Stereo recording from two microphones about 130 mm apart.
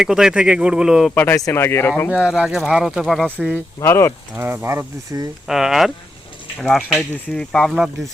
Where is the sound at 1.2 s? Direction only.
20° left (ahead or behind).